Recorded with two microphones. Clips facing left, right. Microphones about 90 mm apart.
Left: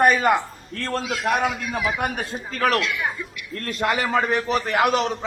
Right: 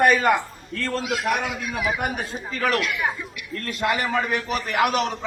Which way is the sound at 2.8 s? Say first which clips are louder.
Even; 10° right (ahead or behind).